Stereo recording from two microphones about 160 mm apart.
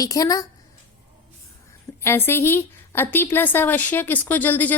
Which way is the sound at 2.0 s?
15° left (ahead or behind).